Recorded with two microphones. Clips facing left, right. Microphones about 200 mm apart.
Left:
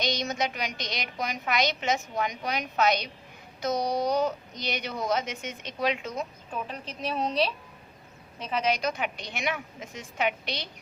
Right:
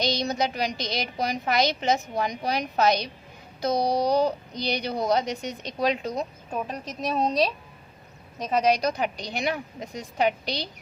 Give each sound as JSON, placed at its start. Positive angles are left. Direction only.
{"t": 0.0, "sound": "speech", "side_deg": -35}